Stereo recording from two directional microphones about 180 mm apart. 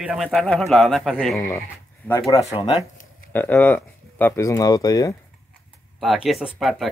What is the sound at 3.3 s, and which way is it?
Speech, 10° left (ahead or behind).